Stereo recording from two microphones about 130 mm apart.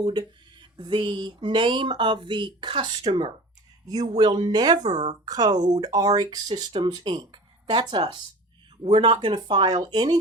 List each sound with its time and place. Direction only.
0.0 s speech: 35° right (ahead or behind)